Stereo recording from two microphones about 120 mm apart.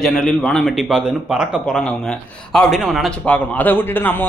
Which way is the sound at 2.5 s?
Centre (ahead or behind).